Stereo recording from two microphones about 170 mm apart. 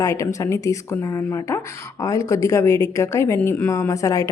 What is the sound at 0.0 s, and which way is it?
Speech, 20° left (ahead or behind).